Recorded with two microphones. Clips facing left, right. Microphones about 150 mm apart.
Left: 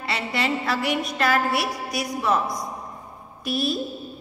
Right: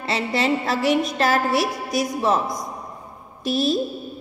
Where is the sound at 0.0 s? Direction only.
30° right (ahead or behind).